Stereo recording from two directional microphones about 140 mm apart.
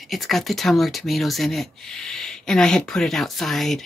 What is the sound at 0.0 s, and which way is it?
Speech, centre (ahead or behind).